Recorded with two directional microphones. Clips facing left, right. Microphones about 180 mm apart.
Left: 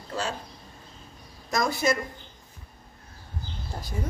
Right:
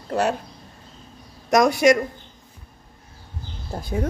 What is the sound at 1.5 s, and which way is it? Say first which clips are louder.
Speech: right 9 dB; 80° right.